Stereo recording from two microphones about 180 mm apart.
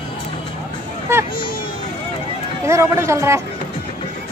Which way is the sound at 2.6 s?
15° right (ahead or behind).